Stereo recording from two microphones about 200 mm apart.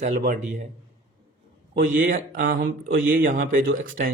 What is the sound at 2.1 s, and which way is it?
Speech, 45° right (ahead or behind).